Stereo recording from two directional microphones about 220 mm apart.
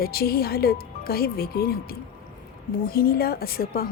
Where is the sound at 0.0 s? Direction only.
45° left (ahead or behind).